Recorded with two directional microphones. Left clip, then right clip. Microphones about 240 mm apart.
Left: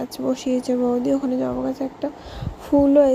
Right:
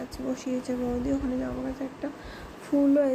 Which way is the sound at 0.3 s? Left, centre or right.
Left.